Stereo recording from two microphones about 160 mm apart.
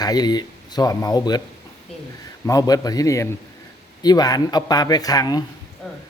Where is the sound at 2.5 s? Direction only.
20° left (ahead or behind).